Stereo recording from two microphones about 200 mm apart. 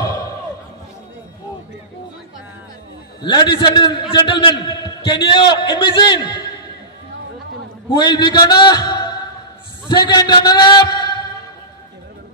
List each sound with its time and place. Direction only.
3.2 s a man's voice: 20° left (ahead or behind)
7.9 s a man's voice: 20° left (ahead or behind)